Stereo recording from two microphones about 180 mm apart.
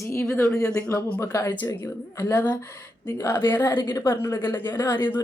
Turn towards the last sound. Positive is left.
turn(degrees=10)  # may be behind; listen again after turning